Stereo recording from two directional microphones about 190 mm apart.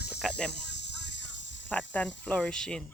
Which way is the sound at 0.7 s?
65° left (ahead or behind).